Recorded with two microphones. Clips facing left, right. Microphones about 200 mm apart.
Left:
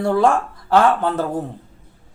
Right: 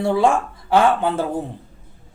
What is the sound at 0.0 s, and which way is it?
Speech, 10° right (ahead or behind).